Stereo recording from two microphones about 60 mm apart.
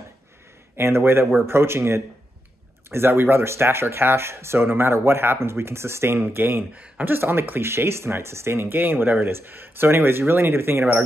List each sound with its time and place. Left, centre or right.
0.7 s speech: right
6.7 s speech: right
7.1 s speech: right